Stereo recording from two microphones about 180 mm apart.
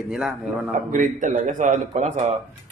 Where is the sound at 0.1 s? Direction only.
Centre (ahead or behind).